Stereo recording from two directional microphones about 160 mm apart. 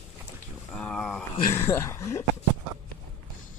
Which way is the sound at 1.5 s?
15° left (ahead or behind).